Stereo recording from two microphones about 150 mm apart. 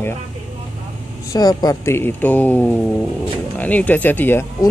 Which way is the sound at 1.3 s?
25° left (ahead or behind).